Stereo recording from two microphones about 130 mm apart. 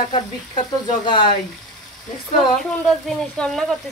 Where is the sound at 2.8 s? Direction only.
5° left (ahead or behind).